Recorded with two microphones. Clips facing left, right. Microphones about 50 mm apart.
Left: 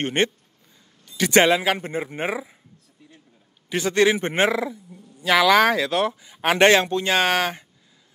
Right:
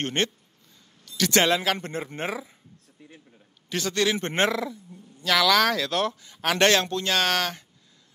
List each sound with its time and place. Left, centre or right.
0.0 s speech: centre
3.6 s a man's voice: centre
4.3 s speech: centre